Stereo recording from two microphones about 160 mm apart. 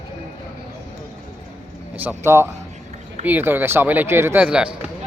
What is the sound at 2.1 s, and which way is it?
Speech, 15° right (ahead or behind).